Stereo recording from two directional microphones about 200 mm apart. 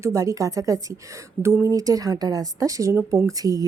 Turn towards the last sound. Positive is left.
turn(degrees=-15)  # may be behind; listen again after turning